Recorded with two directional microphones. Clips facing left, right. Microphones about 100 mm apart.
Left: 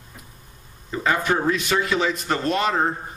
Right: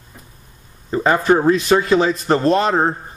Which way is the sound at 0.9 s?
35° right (ahead or behind).